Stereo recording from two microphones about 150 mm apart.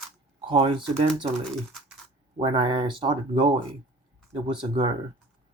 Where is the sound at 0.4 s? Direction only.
35° right (ahead or behind).